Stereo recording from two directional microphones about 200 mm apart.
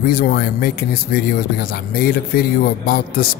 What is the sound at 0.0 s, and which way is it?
Speech, 45° left (ahead or behind).